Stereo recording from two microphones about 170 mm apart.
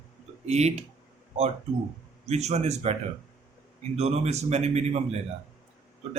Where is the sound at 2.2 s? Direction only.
40° right (ahead or behind).